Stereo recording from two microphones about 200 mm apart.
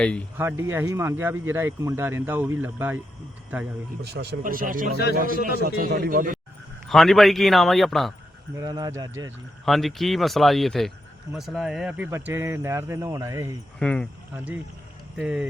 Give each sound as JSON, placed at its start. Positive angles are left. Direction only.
{"t": 0.0, "sound": "speech", "side_deg": 5}
{"t": 0.3, "sound": "speech", "side_deg": -10}
{"t": 4.0, "sound": "speech", "side_deg": -55}
{"t": 6.8, "sound": "a man's voice", "side_deg": 0}
{"t": 8.5, "sound": "speech", "side_deg": -20}
{"t": 9.6, "sound": "a man's voice", "side_deg": 0}
{"t": 13.7, "sound": "a man's voice", "side_deg": 5}
{"t": 14.3, "sound": "a man's voice", "side_deg": -5}